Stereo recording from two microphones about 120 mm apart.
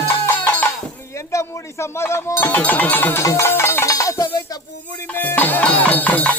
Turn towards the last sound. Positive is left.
turn(degrees=10)  # may be behind; listen again after turning